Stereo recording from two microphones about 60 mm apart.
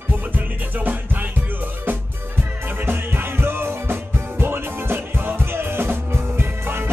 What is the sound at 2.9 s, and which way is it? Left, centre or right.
Music, right.